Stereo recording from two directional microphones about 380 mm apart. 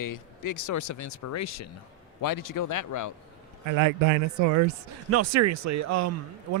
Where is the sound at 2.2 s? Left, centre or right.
Left.